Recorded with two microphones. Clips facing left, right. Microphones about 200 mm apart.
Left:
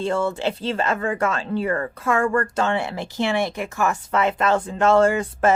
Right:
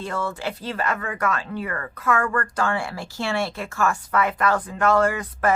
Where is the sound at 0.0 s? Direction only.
25° left (ahead or behind).